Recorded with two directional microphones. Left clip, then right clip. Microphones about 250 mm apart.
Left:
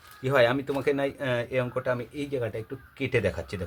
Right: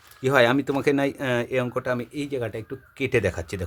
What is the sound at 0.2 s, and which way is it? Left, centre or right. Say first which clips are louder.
Speech: right 4 dB; right.